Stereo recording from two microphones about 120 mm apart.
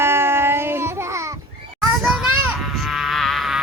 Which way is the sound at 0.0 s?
20° right (ahead or behind).